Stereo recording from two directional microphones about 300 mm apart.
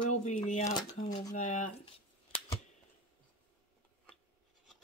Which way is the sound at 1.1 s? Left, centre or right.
Left.